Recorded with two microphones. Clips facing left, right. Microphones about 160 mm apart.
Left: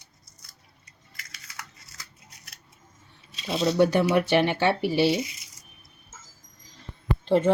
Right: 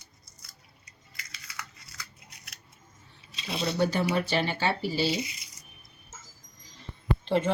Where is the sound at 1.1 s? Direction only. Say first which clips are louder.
Even; 45° left (ahead or behind).